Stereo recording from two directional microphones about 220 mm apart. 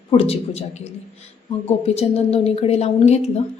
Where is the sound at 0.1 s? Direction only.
25° left (ahead or behind).